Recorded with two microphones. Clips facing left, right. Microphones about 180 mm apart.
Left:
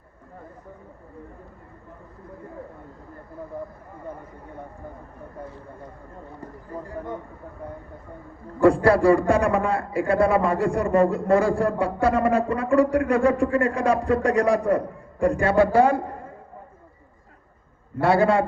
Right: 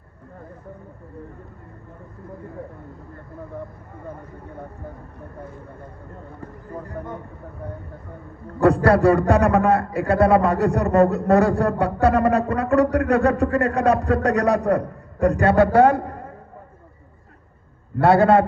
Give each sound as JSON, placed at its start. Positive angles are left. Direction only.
{"t": 9.0, "sound": "a man's voice", "side_deg": -65}
{"t": 18.0, "sound": "speech", "side_deg": -60}